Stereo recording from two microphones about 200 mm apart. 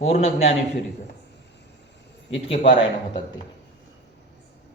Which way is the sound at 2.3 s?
30° left (ahead or behind).